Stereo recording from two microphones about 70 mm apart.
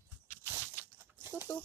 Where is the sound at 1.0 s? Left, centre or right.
Right.